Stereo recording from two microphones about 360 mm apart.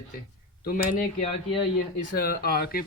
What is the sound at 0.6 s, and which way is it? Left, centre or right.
Speech, left.